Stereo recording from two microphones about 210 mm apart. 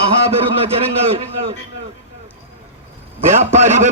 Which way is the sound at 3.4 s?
35° right (ahead or behind).